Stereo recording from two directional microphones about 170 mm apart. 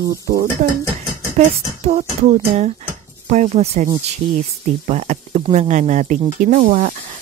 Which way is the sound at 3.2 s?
45° right (ahead or behind).